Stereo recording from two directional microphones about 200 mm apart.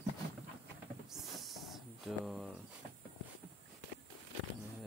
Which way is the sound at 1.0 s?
Centre (ahead or behind).